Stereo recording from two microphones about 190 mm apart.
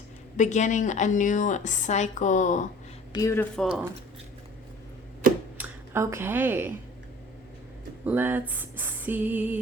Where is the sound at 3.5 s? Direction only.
Centre (ahead or behind).